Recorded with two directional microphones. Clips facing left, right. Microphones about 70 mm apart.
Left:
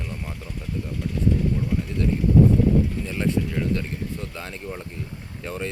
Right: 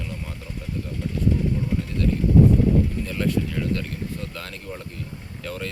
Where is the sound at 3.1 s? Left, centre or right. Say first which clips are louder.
Even; centre.